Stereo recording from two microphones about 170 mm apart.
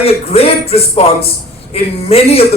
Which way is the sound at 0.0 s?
35° left (ahead or behind).